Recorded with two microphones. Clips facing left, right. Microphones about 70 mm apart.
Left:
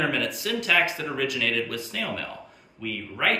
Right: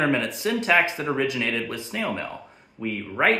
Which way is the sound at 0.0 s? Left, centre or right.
Right.